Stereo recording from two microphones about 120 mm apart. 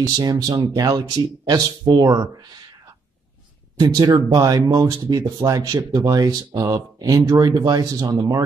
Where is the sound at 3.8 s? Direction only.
35° right (ahead or behind).